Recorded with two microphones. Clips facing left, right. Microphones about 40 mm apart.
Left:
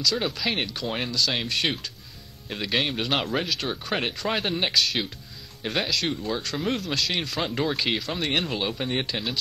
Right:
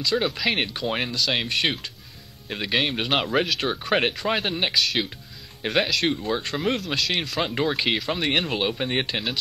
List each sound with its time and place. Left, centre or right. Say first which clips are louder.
0.1 s speech: right 3 dB; right
4.2 s speech: right 2 dB; centre
5.6 s speech: right 4 dB; right
6.6 s speech: right 2 dB; centre
7.4 s speech: right 2 dB; centre